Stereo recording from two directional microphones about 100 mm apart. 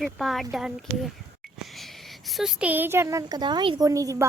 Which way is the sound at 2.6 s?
20° right (ahead or behind).